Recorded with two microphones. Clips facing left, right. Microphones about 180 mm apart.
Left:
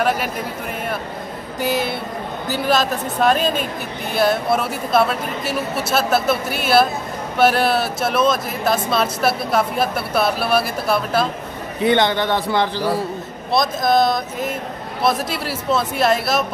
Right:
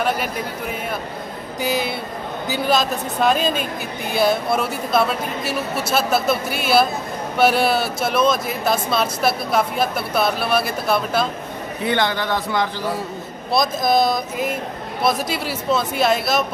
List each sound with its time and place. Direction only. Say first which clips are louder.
1.6 s speech: left 1 dB; 5° left (ahead or behind)
11.9 s a man's voice: left 3 dB; 25° left (ahead or behind)
13.5 s speech: left 1 dB; centre (ahead or behind)